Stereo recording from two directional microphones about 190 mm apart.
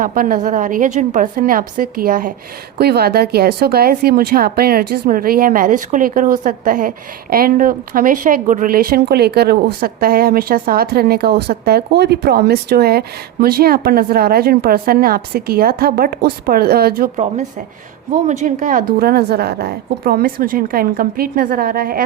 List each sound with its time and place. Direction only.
0.0 s speech: 45° right (ahead or behind)
2.7 s speech: 55° right (ahead or behind)
18.1 s speech: 40° right (ahead or behind)